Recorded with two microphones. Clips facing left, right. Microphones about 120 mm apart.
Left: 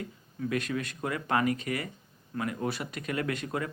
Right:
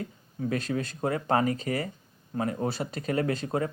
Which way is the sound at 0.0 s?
35° right (ahead or behind).